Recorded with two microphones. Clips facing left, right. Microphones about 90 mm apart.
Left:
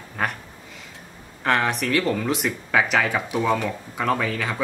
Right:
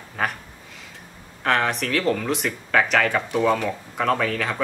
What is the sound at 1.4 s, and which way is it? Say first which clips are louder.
Speech: even; centre (ahead or behind).